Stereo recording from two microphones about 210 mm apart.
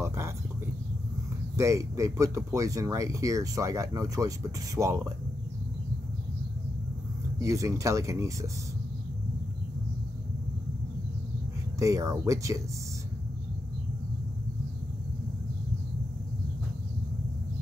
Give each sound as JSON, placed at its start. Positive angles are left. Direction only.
{"t": 0.0, "sound": "a sound", "side_deg": -15}
{"t": 1.6, "sound": "speech", "side_deg": -15}
{"t": 7.3, "sound": "speech", "side_deg": -15}
{"t": 11.8, "sound": "speech", "side_deg": -15}